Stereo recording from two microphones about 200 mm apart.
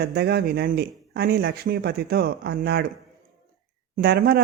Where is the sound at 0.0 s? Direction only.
55° right (ahead or behind).